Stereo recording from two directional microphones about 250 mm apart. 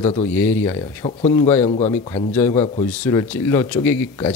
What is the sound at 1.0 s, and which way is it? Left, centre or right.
Speech, left.